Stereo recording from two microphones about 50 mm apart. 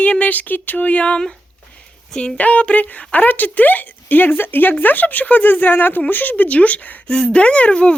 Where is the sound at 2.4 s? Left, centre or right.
Left.